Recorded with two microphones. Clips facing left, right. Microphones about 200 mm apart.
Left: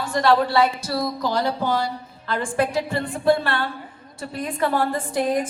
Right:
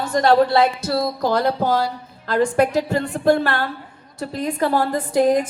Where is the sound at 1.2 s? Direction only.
55° right (ahead or behind).